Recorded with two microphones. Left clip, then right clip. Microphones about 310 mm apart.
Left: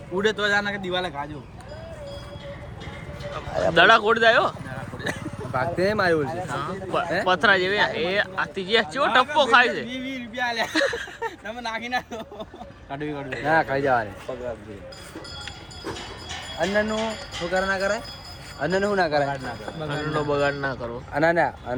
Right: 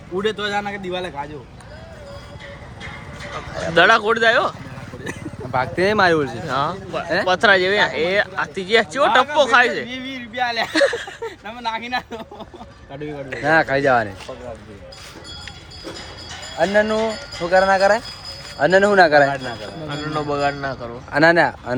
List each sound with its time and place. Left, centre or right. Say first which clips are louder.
0.2 s speech: even; centre
3.3 s speech: right 2 dB; centre
5.5 s speech: right 6 dB; centre
13.4 s speech: right 5 dB; right
16.6 s speech: right 7 dB; right
19.9 s speech: right 1 dB; centre
21.1 s speech: right 7 dB; right